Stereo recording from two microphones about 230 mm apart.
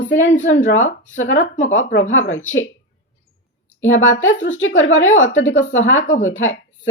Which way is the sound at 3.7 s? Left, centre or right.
Left.